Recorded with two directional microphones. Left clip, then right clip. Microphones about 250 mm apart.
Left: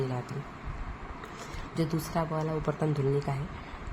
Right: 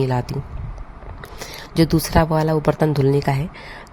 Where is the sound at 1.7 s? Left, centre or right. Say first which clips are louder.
Right 14 dB; right.